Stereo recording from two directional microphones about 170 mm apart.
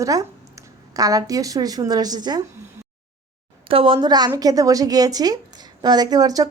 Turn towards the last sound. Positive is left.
turn(degrees=-20)  # may be behind; listen again after turning